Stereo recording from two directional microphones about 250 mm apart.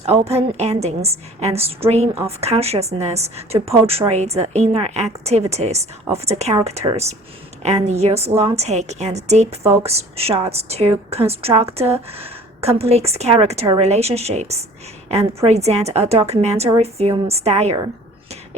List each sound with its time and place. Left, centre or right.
0.0 s a woman's voice: right